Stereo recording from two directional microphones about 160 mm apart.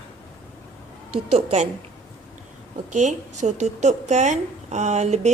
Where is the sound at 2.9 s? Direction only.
50° right (ahead or behind).